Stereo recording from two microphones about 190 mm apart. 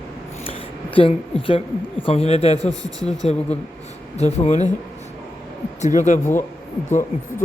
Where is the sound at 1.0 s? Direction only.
30° left (ahead or behind).